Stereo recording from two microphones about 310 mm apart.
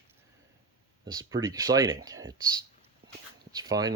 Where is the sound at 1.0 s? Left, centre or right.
Centre.